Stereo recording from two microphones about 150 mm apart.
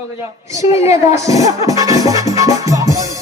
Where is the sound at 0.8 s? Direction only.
45° left (ahead or behind).